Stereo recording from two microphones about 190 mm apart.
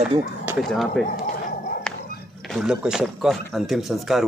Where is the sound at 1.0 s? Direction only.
50° left (ahead or behind).